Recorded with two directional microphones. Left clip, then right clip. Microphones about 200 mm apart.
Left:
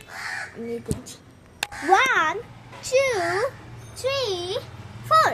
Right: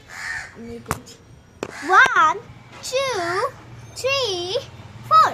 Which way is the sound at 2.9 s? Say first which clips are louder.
Left 2 dB; 5° right (ahead or behind).